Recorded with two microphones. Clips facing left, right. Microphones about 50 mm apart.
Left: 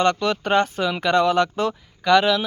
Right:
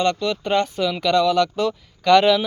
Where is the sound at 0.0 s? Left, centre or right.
Left.